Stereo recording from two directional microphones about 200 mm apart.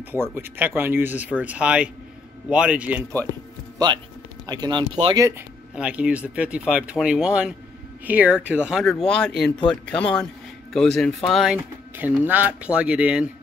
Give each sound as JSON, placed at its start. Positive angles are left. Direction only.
{"t": 0.3, "sound": "speech", "side_deg": -10}
{"t": 5.8, "sound": "speech", "side_deg": -5}